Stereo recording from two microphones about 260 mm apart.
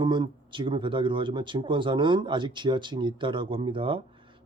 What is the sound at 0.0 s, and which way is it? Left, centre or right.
Speech, centre.